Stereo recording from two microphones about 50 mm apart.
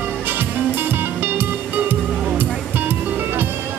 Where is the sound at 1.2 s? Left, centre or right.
Right.